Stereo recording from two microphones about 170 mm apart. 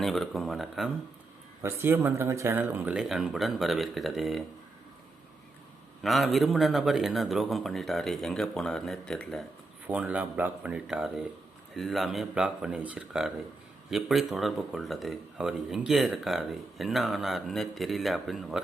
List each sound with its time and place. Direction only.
0.0 s speech: centre (ahead or behind)
1.6 s speech: 15° right (ahead or behind)
6.0 s speech: centre (ahead or behind)
9.8 s speech: 10° right (ahead or behind)